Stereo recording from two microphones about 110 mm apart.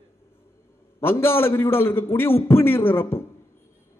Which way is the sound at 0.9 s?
20° left (ahead or behind).